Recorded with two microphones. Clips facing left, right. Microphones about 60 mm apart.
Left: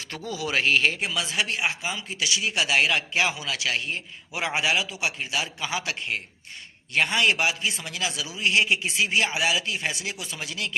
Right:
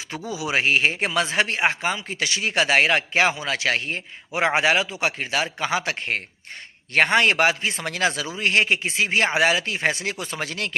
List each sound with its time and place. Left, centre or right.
0.1 s speech: centre
0.9 s speech: right